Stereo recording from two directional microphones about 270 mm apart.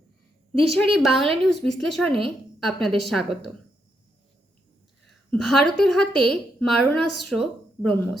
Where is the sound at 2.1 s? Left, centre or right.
Centre.